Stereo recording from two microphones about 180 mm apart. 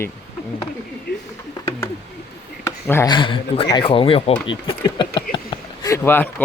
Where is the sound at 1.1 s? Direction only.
55° left (ahead or behind).